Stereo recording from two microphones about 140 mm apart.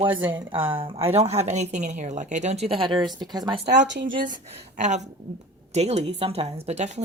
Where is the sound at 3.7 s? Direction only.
75° right (ahead or behind).